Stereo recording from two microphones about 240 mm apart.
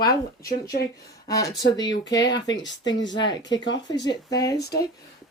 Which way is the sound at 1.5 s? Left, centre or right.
Left.